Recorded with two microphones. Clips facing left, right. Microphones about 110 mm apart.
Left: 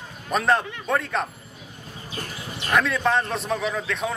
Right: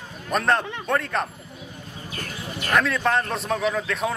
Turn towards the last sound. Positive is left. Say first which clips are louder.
# right 2 dB
turn(degrees=0)  # may be behind; listen again after turning